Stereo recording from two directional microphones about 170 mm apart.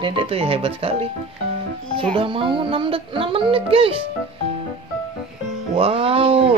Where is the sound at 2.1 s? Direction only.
30° right (ahead or behind).